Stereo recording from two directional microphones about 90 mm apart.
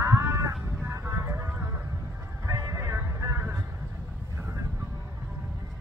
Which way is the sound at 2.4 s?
40° right (ahead or behind).